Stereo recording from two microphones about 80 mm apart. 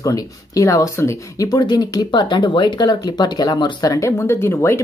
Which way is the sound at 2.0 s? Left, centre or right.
Left.